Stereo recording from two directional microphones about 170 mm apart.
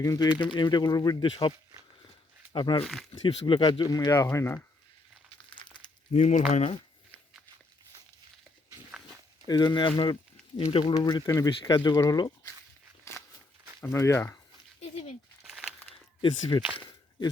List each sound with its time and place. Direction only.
0.0 s speech: 20° left (ahead or behind)
2.8 s speech: centre (ahead or behind)
3.2 s speech: 30° left (ahead or behind)
6.1 s speech: 40° left (ahead or behind)
9.5 s speech: 25° left (ahead or behind)
13.8 s speech: 15° left (ahead or behind)
16.2 s speech: 25° left (ahead or behind)
16.7 s a sound: 30° left (ahead or behind)